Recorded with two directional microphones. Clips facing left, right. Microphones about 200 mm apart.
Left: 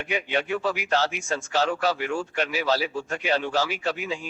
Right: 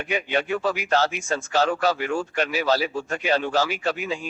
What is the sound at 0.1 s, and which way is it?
A man's voice, 45° right (ahead or behind).